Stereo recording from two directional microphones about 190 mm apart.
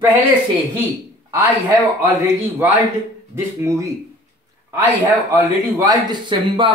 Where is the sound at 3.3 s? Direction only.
15° right (ahead or behind).